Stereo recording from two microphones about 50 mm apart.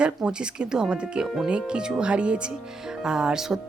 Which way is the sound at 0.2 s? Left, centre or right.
Centre.